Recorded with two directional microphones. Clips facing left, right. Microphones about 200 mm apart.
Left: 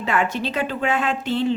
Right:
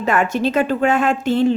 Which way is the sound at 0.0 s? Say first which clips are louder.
Right 5 dB; 45° right (ahead or behind).